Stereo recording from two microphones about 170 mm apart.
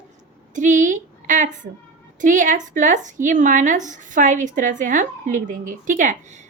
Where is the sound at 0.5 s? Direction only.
45° right (ahead or behind).